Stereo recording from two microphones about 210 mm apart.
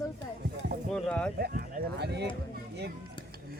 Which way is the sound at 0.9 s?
5° left (ahead or behind).